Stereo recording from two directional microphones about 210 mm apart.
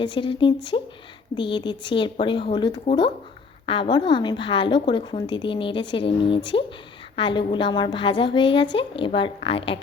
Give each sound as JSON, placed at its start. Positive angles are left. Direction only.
{"t": 0.0, "sound": "a woman's voice", "side_deg": 25}